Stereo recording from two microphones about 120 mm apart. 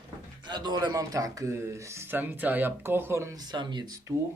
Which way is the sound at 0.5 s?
35° right (ahead or behind).